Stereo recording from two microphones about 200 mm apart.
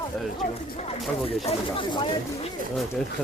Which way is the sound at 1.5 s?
25° left (ahead or behind).